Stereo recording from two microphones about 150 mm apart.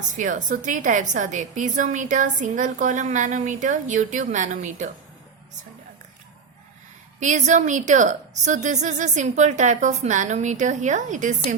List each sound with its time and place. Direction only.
0.1 s a woman's voice: 60° right (ahead or behind)
7.2 s a woman's voice: 55° right (ahead or behind)